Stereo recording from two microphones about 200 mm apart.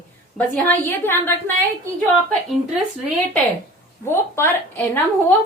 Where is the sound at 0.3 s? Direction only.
5° left (ahead or behind).